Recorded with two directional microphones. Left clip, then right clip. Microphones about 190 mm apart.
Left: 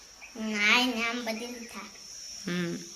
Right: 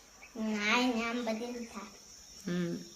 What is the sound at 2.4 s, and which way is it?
Speech, 20° left (ahead or behind).